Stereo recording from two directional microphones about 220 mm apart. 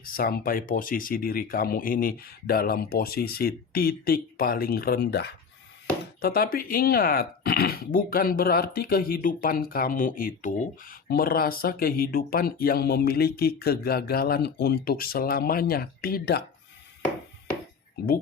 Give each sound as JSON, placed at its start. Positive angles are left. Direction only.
{"t": 0.0, "sound": "speech", "side_deg": 40}